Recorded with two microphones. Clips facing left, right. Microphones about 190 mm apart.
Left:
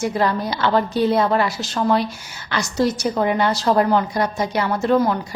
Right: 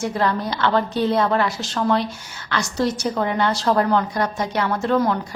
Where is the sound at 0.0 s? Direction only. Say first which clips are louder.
Left 2 dB; 10° left (ahead or behind).